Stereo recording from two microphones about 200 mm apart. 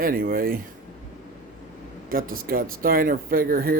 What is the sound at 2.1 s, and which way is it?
Speech, 45° right (ahead or behind).